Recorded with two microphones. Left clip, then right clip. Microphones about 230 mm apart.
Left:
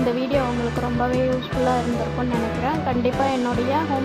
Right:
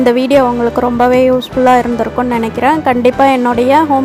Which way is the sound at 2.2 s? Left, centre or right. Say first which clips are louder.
Right 11 dB; right.